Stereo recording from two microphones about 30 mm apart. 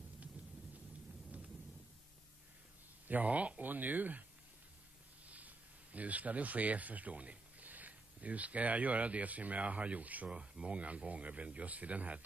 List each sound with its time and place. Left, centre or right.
3.1 s speech: right
3.6 s speech: right
5.2 s speech: right
7.6 s a sound: right
8.2 s speech: right
10.3 s speech: right
10.8 s speech: right